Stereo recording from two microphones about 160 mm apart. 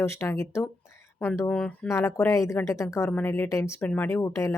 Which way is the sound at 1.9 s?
20° left (ahead or behind).